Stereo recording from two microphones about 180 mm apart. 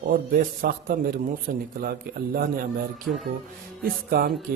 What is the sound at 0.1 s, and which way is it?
A man's voice, 55° right (ahead or behind).